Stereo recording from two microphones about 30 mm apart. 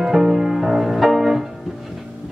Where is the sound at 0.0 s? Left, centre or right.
Centre.